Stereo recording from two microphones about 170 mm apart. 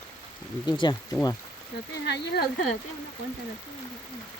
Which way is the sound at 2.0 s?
75° left (ahead or behind).